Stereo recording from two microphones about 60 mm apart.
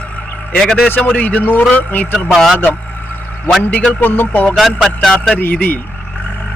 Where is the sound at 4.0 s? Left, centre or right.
Left.